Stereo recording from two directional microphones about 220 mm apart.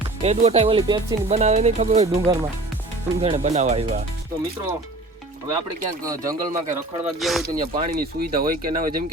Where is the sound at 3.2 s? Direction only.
25° right (ahead or behind).